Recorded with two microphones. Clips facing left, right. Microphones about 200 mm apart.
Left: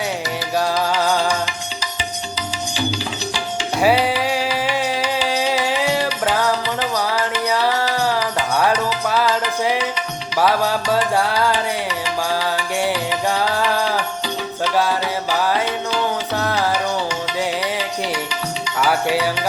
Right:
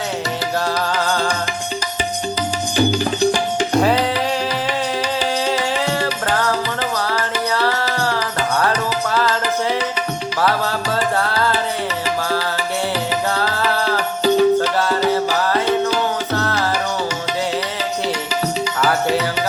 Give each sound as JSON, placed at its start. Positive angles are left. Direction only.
{"t": 0.9, "sound": "music", "side_deg": 10}
{"t": 2.7, "sound": "music", "side_deg": -50}
{"t": 3.8, "sound": "music", "side_deg": 10}
{"t": 5.5, "sound": "music", "side_deg": 10}
{"t": 7.5, "sound": "music", "side_deg": 15}
{"t": 13.3, "sound": "music", "side_deg": 15}
{"t": 14.8, "sound": "music", "side_deg": 10}
{"t": 18.8, "sound": "music", "side_deg": 10}